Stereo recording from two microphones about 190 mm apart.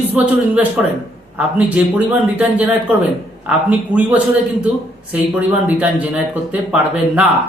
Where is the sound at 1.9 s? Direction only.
5° right (ahead or behind).